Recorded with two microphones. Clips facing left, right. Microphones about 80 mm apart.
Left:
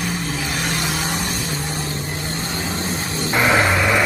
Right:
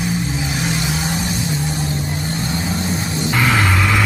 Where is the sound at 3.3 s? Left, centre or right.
Centre.